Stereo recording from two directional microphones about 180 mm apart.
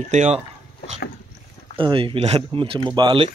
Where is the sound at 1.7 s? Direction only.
30° right (ahead or behind).